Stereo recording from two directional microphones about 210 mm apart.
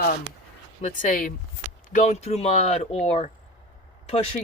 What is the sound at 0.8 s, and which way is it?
Speech, 35° left (ahead or behind).